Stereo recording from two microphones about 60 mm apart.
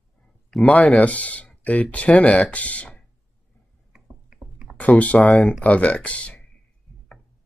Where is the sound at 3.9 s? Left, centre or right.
Centre.